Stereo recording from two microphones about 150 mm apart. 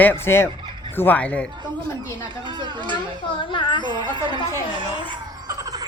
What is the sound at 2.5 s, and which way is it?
Speech, 30° right (ahead or behind).